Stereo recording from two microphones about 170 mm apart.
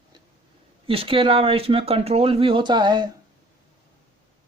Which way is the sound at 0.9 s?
30° right (ahead or behind).